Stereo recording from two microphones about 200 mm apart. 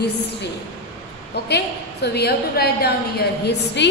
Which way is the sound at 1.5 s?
55° left (ahead or behind).